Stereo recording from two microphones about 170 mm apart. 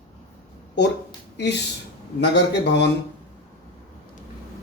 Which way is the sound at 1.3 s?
90° left.